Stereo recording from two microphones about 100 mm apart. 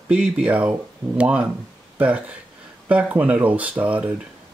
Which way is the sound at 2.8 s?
15° right (ahead or behind).